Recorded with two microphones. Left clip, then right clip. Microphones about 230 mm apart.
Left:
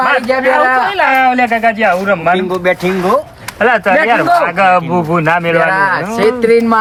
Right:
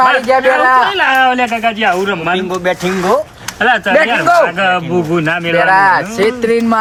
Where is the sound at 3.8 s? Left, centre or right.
Left.